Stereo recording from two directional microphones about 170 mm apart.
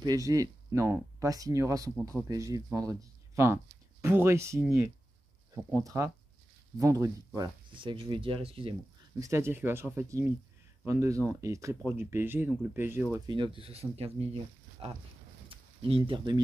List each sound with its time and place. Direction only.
0.0 s speech: 20° right (ahead or behind)
9.2 s speech: 15° right (ahead or behind)
13.6 s speech: 35° right (ahead or behind)
15.4 s a sound: 30° right (ahead or behind)